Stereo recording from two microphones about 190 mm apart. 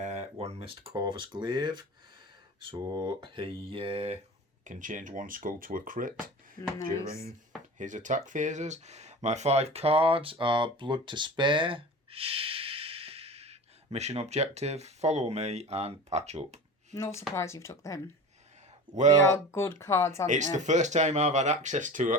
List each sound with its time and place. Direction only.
0.0 s a sound: 35° right (ahead or behind)
0.9 s speech: 25° right (ahead or behind)
4.6 s speech: 40° right (ahead or behind)
7.1 s speech: 15° left (ahead or behind)
7.8 s speech: 40° right (ahead or behind)
16.9 s speech: 15° left (ahead or behind)
18.9 s speech: 40° right (ahead or behind)
19.5 s speech: 10° left (ahead or behind)
20.2 s speech: 40° right (ahead or behind)